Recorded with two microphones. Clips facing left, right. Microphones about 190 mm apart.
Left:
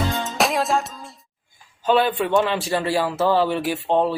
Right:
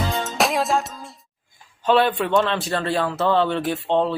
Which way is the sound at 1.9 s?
Centre (ahead or behind).